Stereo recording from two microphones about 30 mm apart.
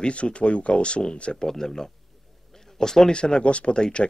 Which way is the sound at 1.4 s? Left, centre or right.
Centre.